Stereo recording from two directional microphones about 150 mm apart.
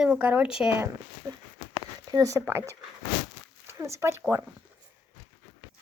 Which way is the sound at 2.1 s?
20° right (ahead or behind).